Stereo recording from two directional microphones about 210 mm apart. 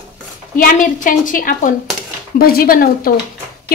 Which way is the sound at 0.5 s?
40° left (ahead or behind).